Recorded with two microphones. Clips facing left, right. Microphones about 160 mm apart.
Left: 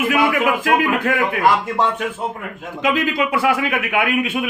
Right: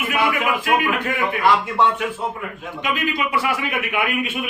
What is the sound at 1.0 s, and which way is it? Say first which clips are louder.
Speech: left 4 dB; 60° left (ahead or behind).